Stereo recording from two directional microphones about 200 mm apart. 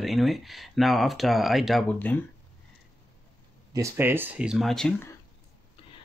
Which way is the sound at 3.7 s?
15° right (ahead or behind).